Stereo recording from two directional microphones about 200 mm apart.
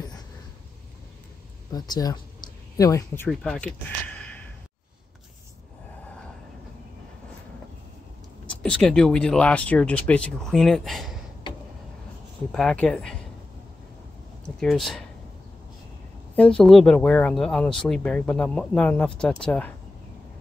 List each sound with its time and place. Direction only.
1.7 s speech: 20° left (ahead or behind)
3.3 s speech: 5° left (ahead or behind)
8.5 s speech: 5° left (ahead or behind)
12.5 s speech: 5° left (ahead or behind)
14.4 s speech: centre (ahead or behind)
16.3 s speech: 5° left (ahead or behind)